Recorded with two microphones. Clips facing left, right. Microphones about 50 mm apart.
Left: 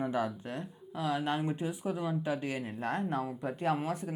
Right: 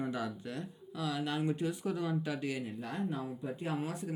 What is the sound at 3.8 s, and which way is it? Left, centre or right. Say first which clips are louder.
Speech: left 3 dB; left.